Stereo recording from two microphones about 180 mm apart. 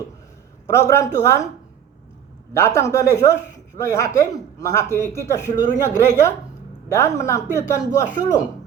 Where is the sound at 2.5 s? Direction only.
15° left (ahead or behind).